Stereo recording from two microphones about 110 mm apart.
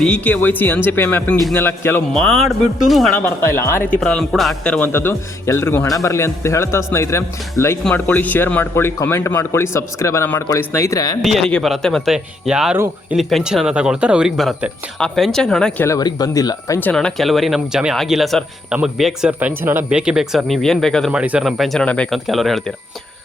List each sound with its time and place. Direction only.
0.0 s speech: 10° left (ahead or behind)
2.1 s speech: 5° left (ahead or behind)
3.2 s speech: 20° left (ahead or behind)
3.8 s speech: 10° left (ahead or behind)
4.9 s speech: 20° left (ahead or behind)
11.2 s speech: centre (ahead or behind)
12.1 s speech: 5° right (ahead or behind)
12.7 s speech: 20° right (ahead or behind)
13.1 s speech: 5° right (ahead or behind)
16.0 s speech: 35° left (ahead or behind)
16.9 s speech: 5° left (ahead or behind)
19.4 s speech: 15° right (ahead or behind); by 21.1 s 5° left (ahead or behind)
21.1 s speech: 10° right (ahead or behind)